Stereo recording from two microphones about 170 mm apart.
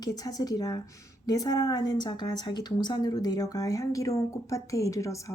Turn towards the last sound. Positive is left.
turn(degrees=20)  # may be behind; listen again after turning